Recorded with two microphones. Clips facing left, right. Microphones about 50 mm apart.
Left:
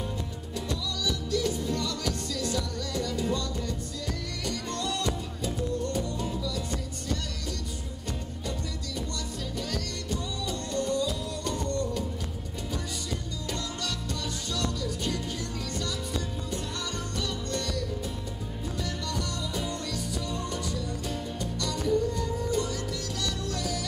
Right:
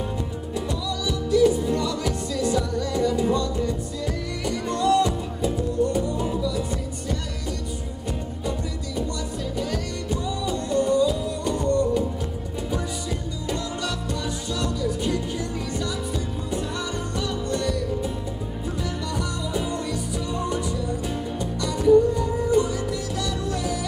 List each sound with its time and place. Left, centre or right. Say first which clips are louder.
0.6 s music: right 5 dB; centre
9.6 s music: right 6 dB; centre
14.5 s music: right 6 dB; centre
17.5 s music: right 7 dB; centre
19.1 s music: right 6 dB; centre